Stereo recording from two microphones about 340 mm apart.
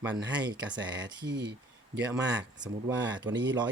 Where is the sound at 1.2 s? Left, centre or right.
Right.